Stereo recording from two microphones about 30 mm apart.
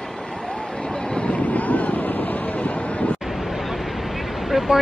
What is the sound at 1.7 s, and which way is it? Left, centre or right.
Boat, left.